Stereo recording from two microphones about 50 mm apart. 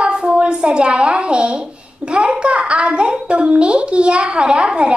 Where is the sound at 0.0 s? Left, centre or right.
Centre.